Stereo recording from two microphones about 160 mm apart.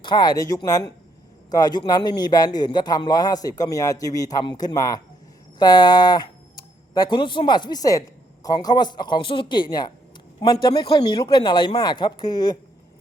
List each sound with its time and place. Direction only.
0.0 s a man's voice: 25° left (ahead or behind)